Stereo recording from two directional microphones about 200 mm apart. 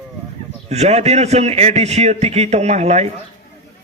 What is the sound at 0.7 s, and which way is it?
A man's voice, 30° right (ahead or behind).